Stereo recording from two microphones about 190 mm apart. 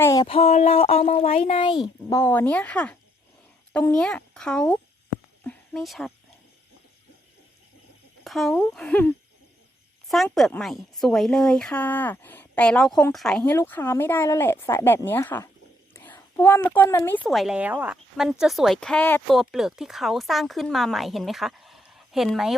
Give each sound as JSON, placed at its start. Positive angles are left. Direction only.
{"t": 0.0, "sound": "a sound", "side_deg": 15}
{"t": 0.3, "sound": "speech", "side_deg": 35}
{"t": 5.4, "sound": "a sound", "side_deg": 5}
{"t": 8.2, "sound": "a woman's voice", "side_deg": 0}
{"t": 15.9, "sound": "whispering", "side_deg": 15}
{"t": 17.0, "sound": "speech", "side_deg": 10}
{"t": 19.4, "sound": "speech", "side_deg": 0}